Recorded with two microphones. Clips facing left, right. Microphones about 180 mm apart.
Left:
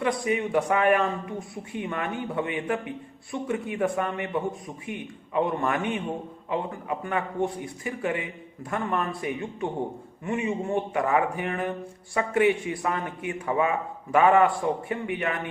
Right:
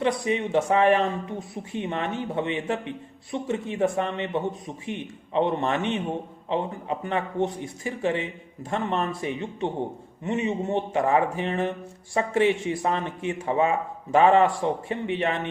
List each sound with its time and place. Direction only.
0.0 s speech: 25° right (ahead or behind)